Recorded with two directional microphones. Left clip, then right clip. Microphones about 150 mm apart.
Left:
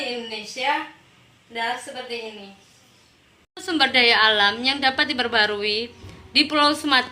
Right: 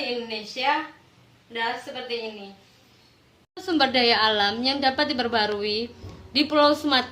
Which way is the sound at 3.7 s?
35° right (ahead or behind).